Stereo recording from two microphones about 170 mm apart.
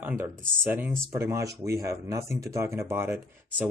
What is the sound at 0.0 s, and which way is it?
Speech, 15° right (ahead or behind).